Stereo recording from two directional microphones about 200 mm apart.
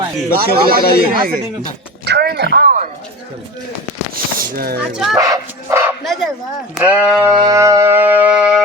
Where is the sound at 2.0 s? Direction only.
55° right (ahead or behind).